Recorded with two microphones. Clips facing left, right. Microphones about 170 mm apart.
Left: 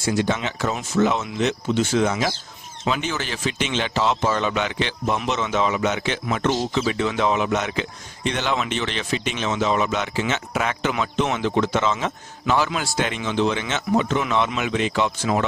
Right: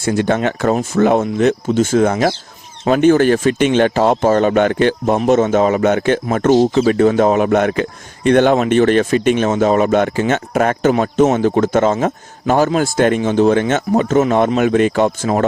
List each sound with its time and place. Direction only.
0.0 s speech: 55° right (ahead or behind)